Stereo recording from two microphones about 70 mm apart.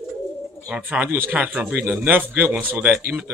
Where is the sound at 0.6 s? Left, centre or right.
Centre.